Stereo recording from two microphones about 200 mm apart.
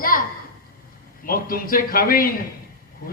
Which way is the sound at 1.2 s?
45° left (ahead or behind).